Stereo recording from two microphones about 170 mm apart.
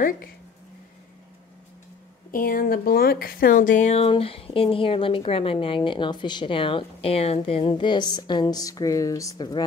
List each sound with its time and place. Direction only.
2.3 s speech: 55° left (ahead or behind); by 9.7 s 25° left (ahead or behind)